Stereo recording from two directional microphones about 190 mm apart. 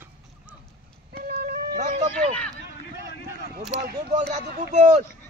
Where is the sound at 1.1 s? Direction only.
55° right (ahead or behind).